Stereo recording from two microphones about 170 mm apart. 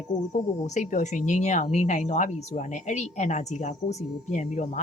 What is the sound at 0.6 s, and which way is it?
A woman's voice, 45° left (ahead or behind).